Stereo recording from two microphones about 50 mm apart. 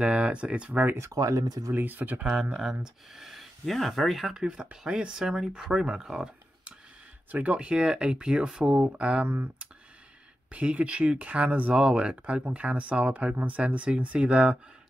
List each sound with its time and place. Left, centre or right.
0.0 s speech: right
0.9 s speech: right
1.7 s speech: right
2.5 s speech: centre
4.3 s speech: centre
7.2 s speech: right
7.5 s speech: centre
9.2 s speech: right
10.5 s speech: right